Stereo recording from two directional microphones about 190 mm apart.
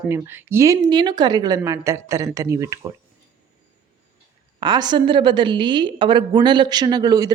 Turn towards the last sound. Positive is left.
turn(degrees=-20)  # may be behind; listen again after turning